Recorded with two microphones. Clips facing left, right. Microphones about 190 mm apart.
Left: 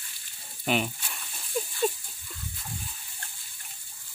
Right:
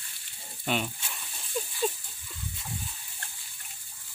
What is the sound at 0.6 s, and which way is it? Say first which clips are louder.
Speech: left 3 dB; 10° left (ahead or behind).